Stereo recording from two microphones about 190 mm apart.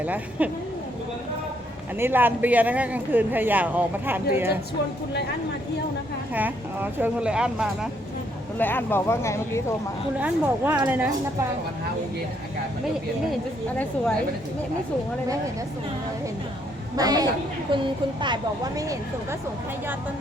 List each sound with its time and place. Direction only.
0.0 s speech: 10° right (ahead or behind)
2.0 s speech: 10° right (ahead or behind)
6.3 s speech: 10° right (ahead or behind)
8.5 s speech: 10° left (ahead or behind)
10.2 s speech: 10° right (ahead or behind)
17.0 s speech: 20° right (ahead or behind)